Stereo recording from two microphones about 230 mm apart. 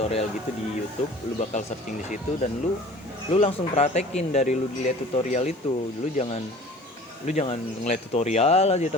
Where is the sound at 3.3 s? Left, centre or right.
Left.